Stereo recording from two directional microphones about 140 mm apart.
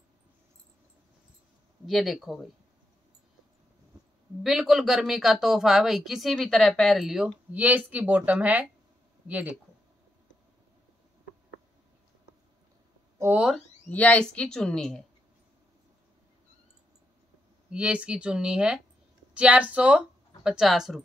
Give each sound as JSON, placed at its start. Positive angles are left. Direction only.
{"t": 1.9, "sound": "speech", "side_deg": 0}
{"t": 4.4, "sound": "speech", "side_deg": 0}
{"t": 13.2, "sound": "speech", "side_deg": -15}
{"t": 13.8, "sound": "speech", "side_deg": 10}
{"t": 17.6, "sound": "speech", "side_deg": -10}